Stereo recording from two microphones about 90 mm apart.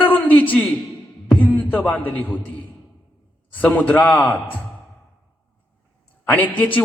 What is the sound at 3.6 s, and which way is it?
Speech, 15° left (ahead or behind).